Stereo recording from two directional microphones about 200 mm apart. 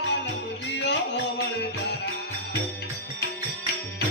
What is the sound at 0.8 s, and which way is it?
Music, 60° left (ahead or behind).